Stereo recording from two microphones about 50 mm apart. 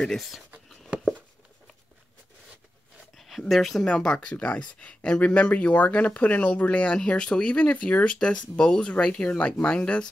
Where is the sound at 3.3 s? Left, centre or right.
Centre.